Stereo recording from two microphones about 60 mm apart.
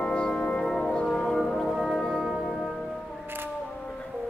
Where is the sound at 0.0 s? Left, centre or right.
Centre.